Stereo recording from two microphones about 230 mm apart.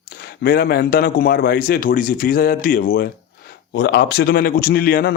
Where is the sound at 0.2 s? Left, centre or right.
Left.